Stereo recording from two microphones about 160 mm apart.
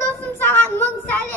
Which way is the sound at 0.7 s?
10° left (ahead or behind).